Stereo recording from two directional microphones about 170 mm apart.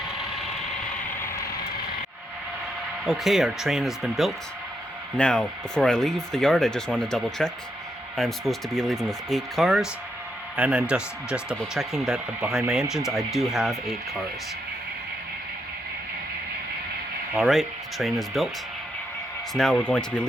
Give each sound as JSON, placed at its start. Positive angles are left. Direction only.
{"t": 1.2, "sound": "vehicle", "side_deg": 15}
{"t": 3.1, "sound": "speech", "side_deg": 0}
{"t": 17.3, "sound": "speech", "side_deg": 0}
{"t": 19.5, "sound": "speech", "side_deg": 5}